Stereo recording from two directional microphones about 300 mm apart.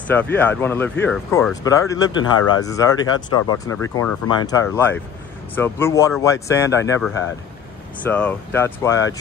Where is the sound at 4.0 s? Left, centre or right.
Centre.